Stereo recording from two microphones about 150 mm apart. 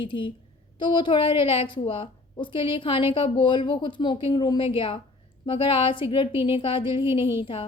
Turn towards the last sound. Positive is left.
turn(degrees=-15)  # may be behind; listen again after turning